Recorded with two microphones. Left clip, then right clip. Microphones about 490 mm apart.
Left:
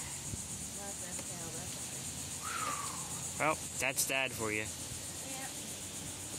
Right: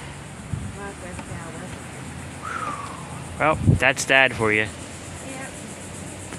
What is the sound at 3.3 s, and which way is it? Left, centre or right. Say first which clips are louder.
Speech: right 13 dB; left.